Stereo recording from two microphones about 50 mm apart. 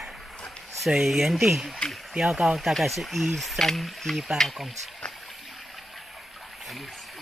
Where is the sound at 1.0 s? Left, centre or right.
Centre.